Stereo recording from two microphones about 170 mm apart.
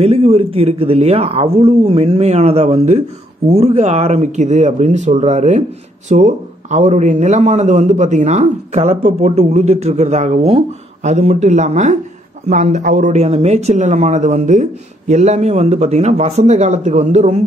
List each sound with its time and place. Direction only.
0.0 s a man's voice: 35° right (ahead or behind)